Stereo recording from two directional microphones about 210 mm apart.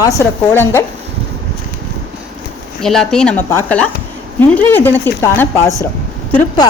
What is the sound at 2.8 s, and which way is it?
Speech, centre (ahead or behind).